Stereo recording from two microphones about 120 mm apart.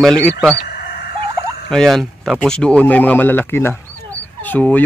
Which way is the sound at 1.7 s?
5° left (ahead or behind).